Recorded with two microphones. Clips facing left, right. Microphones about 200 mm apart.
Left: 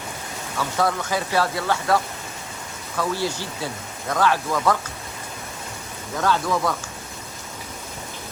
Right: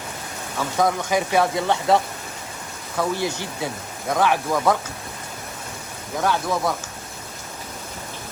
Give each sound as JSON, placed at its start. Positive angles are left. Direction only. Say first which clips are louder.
{"t": 0.8, "sound": "speech", "louder": "right 3 dB", "side_deg": -15}
{"t": 3.0, "sound": "speech", "louder": "right 1 dB", "side_deg": -15}
{"t": 6.2, "sound": "speech", "louder": "even", "side_deg": -15}